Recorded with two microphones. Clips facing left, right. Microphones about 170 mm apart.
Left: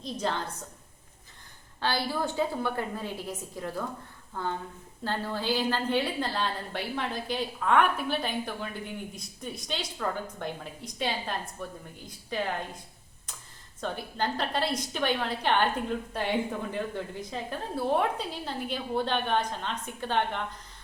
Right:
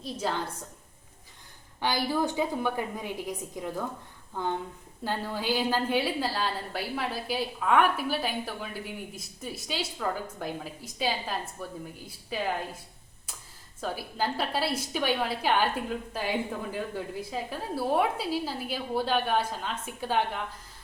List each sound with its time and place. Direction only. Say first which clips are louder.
0.0 s a woman's voice: even; 5° right (ahead or behind)
1.8 s a woman's voice: right 2 dB; 15° right (ahead or behind)
5.0 s a woman's voice: even; 10° right (ahead or behind)
13.8 s a woman's voice: even; 5° right (ahead or behind)